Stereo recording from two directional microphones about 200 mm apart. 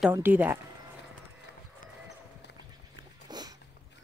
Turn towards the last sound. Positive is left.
turn(degrees=-20)  # may be behind; listen again after turning